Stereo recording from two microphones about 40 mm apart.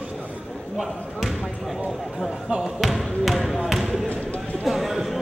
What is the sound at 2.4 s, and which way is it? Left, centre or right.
Basketball bounce, centre.